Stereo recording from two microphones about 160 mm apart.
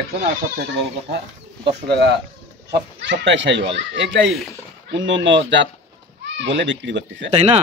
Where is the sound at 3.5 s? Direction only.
90° right.